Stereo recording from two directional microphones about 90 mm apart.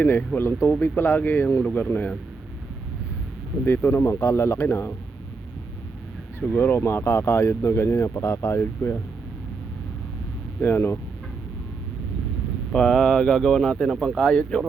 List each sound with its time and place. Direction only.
0.0 s speech: 20° left (ahead or behind)
3.7 s speech: 25° left (ahead or behind)
6.4 s speech: 20° left (ahead or behind)
10.6 s speech: 25° left (ahead or behind)
12.7 s speech: 10° left (ahead or behind)